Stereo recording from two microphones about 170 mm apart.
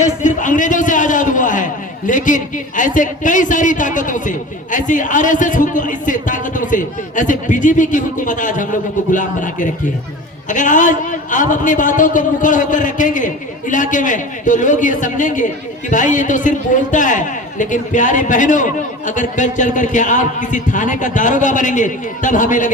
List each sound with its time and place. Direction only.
0.0 s a man's voice: 45° left (ahead or behind)